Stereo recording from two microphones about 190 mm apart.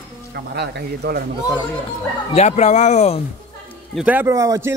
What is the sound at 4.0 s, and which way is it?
Speech, 10° right (ahead or behind).